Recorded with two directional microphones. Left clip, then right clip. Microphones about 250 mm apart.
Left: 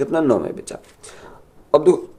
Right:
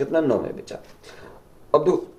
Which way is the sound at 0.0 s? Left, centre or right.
Left.